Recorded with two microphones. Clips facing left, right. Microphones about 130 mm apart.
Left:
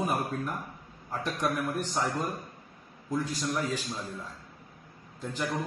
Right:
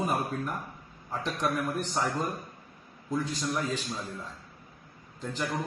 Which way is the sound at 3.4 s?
Centre (ahead or behind).